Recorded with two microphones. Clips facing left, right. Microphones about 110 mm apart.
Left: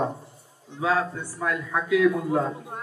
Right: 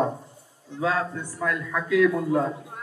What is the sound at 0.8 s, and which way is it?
Speech, 20° left (ahead or behind).